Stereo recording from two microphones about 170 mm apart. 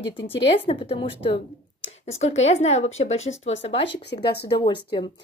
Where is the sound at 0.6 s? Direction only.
35° left (ahead or behind).